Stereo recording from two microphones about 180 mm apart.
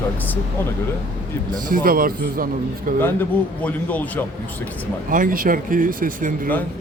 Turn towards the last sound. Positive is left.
turn(degrees=-50)  # may be behind; listen again after turning